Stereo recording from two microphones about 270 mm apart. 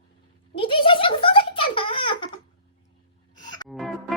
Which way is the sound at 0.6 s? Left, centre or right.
Centre.